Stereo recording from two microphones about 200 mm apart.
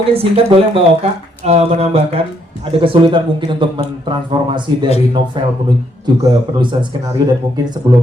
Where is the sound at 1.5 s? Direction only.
30° right (ahead or behind).